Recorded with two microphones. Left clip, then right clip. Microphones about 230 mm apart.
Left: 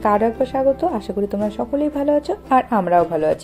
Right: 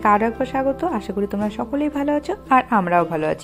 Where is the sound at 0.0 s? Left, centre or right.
Right.